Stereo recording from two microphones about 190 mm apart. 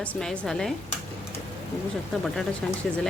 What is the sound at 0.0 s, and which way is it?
Speech, 5° left (ahead or behind).